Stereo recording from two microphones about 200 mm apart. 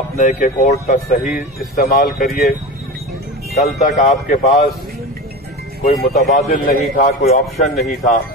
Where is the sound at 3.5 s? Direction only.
35° left (ahead or behind).